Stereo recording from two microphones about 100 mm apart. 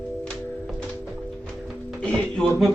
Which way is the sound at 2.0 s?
10° left (ahead or behind).